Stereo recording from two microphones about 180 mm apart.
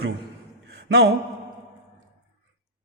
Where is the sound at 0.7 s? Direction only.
70° right (ahead or behind).